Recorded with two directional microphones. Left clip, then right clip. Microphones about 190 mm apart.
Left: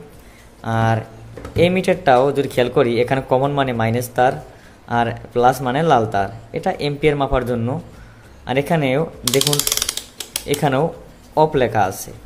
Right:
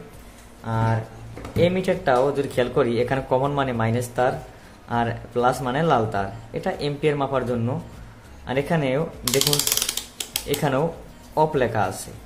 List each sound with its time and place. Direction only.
0.7 s speech: 30° left (ahead or behind)